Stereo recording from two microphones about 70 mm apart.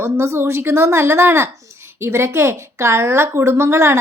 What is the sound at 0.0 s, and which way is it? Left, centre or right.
A woman's voice, right.